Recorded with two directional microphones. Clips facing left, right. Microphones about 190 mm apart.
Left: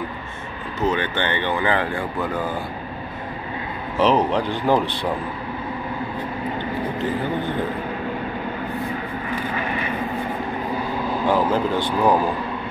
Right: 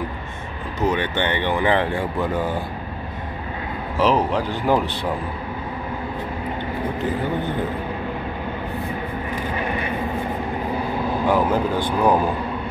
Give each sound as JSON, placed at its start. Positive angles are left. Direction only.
{"t": 0.8, "sound": "speech", "side_deg": -20}
{"t": 4.0, "sound": "speech", "side_deg": -5}
{"t": 11.2, "sound": "speech", "side_deg": -10}
{"t": 12.0, "sound": "a man's voice", "side_deg": 0}